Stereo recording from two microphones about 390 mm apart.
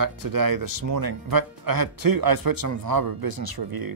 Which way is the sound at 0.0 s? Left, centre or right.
Right.